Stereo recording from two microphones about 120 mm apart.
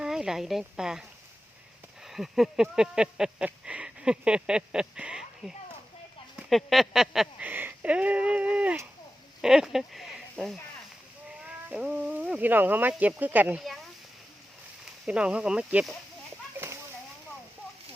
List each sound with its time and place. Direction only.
0.0 s speech: 5° right (ahead or behind)
2.0 s speech: centre (ahead or behind)
15.0 s speech: 10° right (ahead or behind)
16.6 s a sound: 15° right (ahead or behind)